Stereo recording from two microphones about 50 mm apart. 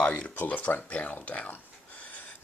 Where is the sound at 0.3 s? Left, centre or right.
Left.